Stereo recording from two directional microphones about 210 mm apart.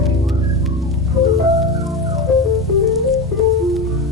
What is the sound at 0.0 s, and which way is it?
Organ, centre (ahead or behind).